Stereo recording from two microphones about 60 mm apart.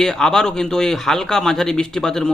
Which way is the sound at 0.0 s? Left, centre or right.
Centre.